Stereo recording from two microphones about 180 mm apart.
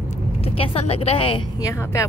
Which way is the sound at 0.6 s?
35° left (ahead or behind).